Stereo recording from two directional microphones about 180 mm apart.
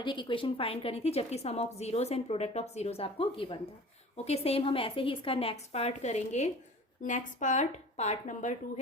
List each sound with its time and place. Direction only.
0.0 s a woman's voice: 25° left (ahead or behind); by 8.8 s 45° left (ahead or behind)